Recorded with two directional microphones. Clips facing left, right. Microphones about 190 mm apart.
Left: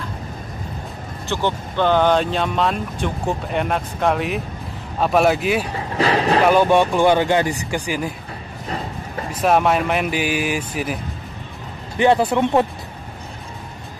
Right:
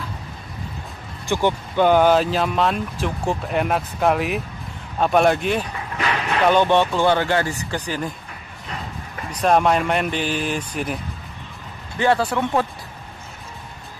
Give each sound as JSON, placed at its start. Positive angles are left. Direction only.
{"t": 1.3, "sound": "speech", "side_deg": -10}
{"t": 5.7, "sound": "vehicle", "side_deg": 30}
{"t": 6.5, "sound": "speech", "side_deg": 10}
{"t": 8.6, "sound": "music", "side_deg": 35}
{"t": 9.4, "sound": "speech", "side_deg": 5}
{"t": 12.0, "sound": "speech", "side_deg": 20}